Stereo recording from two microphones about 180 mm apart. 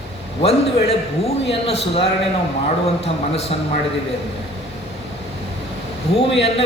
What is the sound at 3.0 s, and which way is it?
Speech, 35° left (ahead or behind).